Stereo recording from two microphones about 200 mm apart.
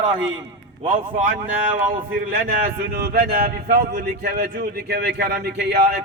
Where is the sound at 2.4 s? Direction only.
45° right (ahead or behind).